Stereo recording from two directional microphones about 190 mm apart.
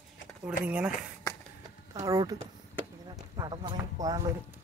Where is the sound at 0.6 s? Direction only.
5° right (ahead or behind).